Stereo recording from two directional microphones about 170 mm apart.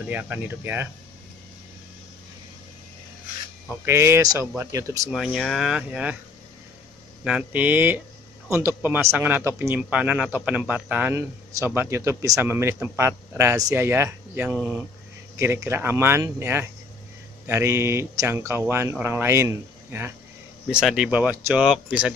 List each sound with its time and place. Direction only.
0.0 s speech: 10° right (ahead or behind)
3.6 s speech: 15° right (ahead or behind)
5.1 s speech: centre (ahead or behind)
7.2 s speech: 5° right (ahead or behind)
20.6 s speech: 5° right (ahead or behind)